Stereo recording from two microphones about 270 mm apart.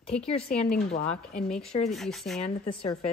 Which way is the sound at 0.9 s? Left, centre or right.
Left.